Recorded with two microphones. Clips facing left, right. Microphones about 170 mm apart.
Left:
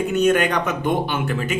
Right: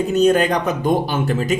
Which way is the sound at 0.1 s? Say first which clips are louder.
Right 3 dB; 35° right (ahead or behind).